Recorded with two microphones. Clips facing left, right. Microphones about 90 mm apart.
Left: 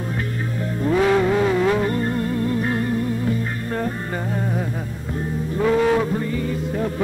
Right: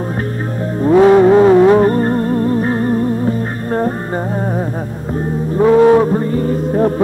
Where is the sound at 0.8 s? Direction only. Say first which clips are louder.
Right 10 dB; 35° right (ahead or behind).